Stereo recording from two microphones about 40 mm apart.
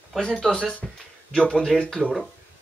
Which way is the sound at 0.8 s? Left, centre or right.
Centre.